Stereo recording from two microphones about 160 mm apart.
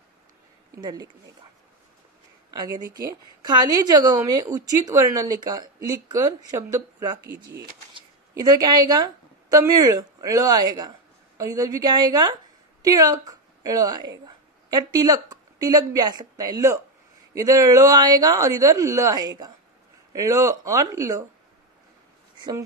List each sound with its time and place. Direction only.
0.7 s speech: 25° right (ahead or behind)
2.5 s a woman's voice: 25° right (ahead or behind)